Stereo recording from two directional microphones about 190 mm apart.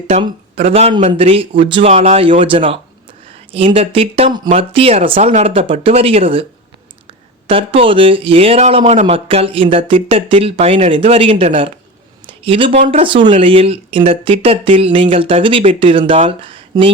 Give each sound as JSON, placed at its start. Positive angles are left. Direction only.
{"t": 0.1, "sound": "speech", "side_deg": -30}
{"t": 7.4, "sound": "speech", "side_deg": -30}
{"t": 12.2, "sound": "a sound", "side_deg": -25}
{"t": 12.9, "sound": "speech", "side_deg": -30}